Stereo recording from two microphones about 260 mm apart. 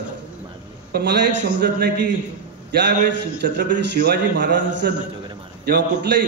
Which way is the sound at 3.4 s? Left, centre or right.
Right.